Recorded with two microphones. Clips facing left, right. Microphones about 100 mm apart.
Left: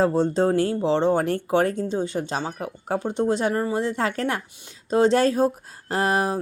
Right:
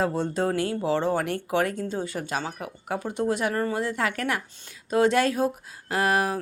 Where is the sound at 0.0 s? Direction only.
30° left (ahead or behind).